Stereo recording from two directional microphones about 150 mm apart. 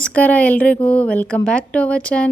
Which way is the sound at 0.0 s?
10° left (ahead or behind).